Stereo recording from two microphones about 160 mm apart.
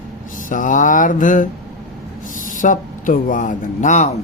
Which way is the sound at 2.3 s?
55° left (ahead or behind).